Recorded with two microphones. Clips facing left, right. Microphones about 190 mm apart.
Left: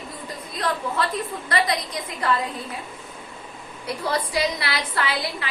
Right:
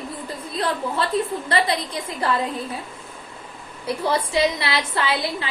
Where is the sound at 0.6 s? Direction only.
30° right (ahead or behind).